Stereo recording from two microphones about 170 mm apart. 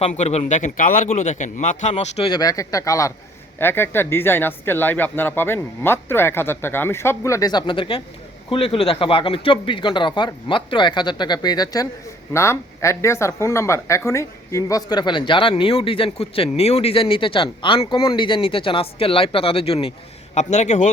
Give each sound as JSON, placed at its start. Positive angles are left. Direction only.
{"t": 0.2, "sound": "a man's voice", "side_deg": 40}
{"t": 1.0, "sound": "a man's voice", "side_deg": 40}